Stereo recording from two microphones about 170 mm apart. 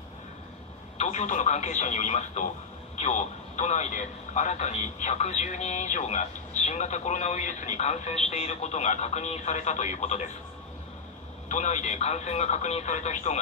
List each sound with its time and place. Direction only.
0.9 s speech: 40° left (ahead or behind)
11.4 s speech: 45° left (ahead or behind)